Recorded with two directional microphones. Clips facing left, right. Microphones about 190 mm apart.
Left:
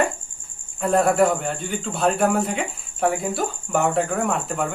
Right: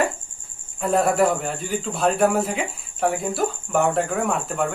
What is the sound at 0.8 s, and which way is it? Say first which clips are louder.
A man's voice: left 1 dB; centre (ahead or behind).